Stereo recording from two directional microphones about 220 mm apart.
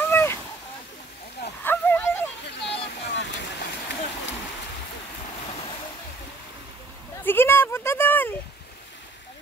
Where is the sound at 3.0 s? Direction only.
55° left (ahead or behind).